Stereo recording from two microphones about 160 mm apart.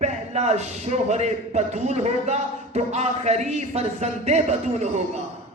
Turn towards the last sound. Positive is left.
turn(degrees=-45)  # may be behind; listen again after turning